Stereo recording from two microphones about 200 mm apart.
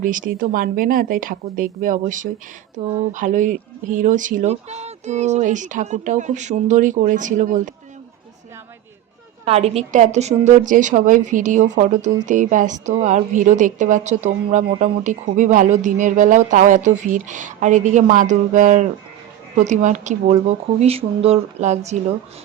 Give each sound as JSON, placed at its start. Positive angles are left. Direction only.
{"t": 0.0, "sound": "a woman's voice", "side_deg": -40}
{"t": 9.4, "sound": "a woman's voice", "side_deg": -30}